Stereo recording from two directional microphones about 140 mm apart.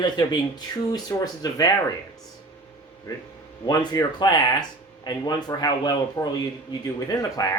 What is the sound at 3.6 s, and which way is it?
Speech, 30° left (ahead or behind).